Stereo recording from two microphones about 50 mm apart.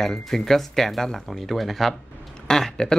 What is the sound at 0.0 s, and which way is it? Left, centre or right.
Speech, centre.